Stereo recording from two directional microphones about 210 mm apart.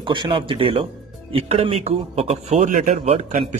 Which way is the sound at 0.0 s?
25° right (ahead or behind).